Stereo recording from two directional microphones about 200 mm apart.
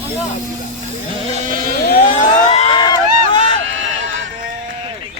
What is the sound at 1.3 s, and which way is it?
Sheep, 40° right (ahead or behind).